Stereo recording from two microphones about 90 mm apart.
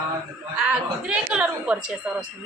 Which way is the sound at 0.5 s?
5° right (ahead or behind).